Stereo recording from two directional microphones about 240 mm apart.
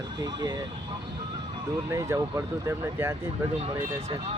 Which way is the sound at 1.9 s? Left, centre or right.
Centre.